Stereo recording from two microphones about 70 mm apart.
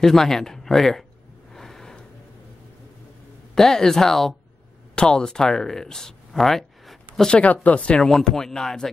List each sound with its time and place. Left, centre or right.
0.0 s speech: centre
1.5 s a sound: centre
3.5 s speech: centre
8.1 s speech: centre